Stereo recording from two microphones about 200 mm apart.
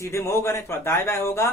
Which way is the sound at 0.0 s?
15° left (ahead or behind).